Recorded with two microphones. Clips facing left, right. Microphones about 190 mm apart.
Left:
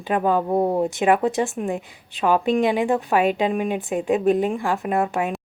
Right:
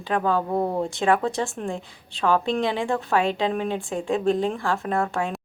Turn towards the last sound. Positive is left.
turn(degrees=15)  # may be behind; listen again after turning